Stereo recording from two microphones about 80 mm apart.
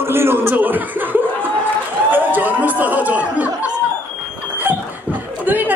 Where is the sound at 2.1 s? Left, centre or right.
Right.